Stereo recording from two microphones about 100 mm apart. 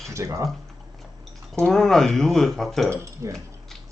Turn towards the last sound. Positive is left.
turn(degrees=-30)  # may be behind; listen again after turning